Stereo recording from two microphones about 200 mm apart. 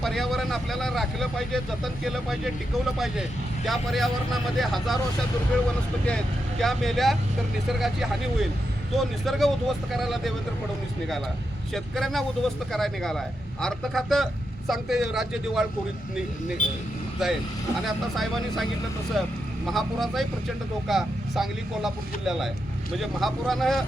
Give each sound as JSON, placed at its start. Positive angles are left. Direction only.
{"t": 0.0, "sound": "speech", "side_deg": 0}
{"t": 6.1, "sound": "speech", "side_deg": 5}
{"t": 11.7, "sound": "speech", "side_deg": 0}
{"t": 16.6, "sound": "speech", "side_deg": 40}
{"t": 17.2, "sound": "speech", "side_deg": 0}